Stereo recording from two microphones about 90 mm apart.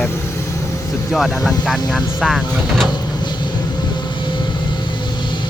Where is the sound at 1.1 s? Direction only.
5° right (ahead or behind).